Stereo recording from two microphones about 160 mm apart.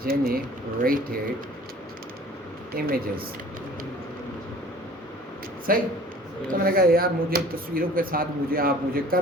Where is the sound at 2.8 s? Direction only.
70° right (ahead or behind).